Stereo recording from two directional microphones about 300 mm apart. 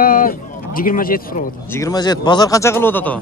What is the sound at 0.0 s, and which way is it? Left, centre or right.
Speech, left.